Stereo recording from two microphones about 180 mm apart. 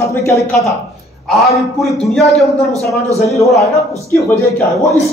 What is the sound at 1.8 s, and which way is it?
A man's voice, centre (ahead or behind).